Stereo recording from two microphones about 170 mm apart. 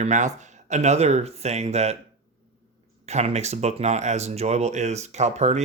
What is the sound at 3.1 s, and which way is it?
Speech, 40° right (ahead or behind).